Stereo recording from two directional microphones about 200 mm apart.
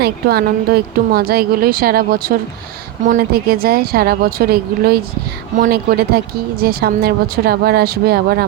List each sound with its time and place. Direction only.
0.0 s speech: 50° right (ahead or behind)